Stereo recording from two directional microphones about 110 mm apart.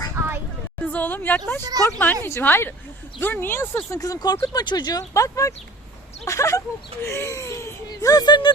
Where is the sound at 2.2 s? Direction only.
20° left (ahead or behind).